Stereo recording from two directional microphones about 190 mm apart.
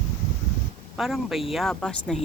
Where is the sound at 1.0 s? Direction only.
Centre (ahead or behind).